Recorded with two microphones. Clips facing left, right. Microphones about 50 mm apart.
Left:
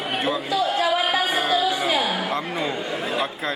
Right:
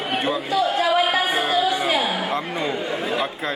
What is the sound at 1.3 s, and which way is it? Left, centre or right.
Music, centre.